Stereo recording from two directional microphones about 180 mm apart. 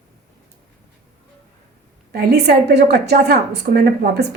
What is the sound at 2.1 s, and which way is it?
A woman's voice, 60° right (ahead or behind).